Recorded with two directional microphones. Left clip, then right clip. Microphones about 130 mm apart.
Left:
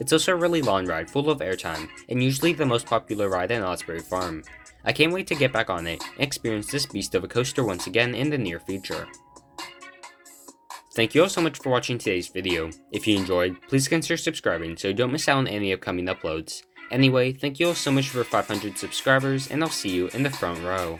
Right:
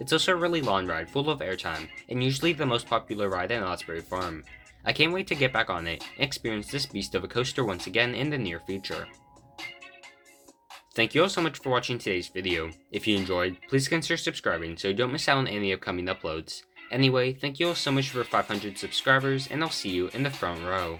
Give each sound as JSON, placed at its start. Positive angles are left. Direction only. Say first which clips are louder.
{"t": 0.0, "sound": "speech", "louder": "left 3 dB", "side_deg": 45}
{"t": 10.9, "sound": "speech", "louder": "left 3 dB", "side_deg": 40}